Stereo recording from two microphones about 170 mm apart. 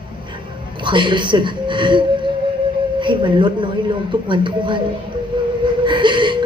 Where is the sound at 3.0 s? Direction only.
30° right (ahead or behind).